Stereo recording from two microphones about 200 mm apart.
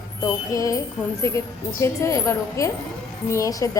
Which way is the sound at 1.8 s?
15° left (ahead or behind).